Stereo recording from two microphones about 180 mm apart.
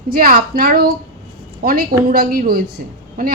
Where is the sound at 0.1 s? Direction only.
55° right (ahead or behind).